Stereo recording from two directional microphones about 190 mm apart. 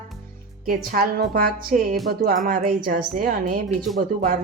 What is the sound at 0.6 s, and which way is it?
A woman's voice, 50° right (ahead or behind).